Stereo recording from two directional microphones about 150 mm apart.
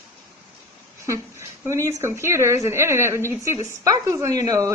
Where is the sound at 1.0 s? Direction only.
20° right (ahead or behind).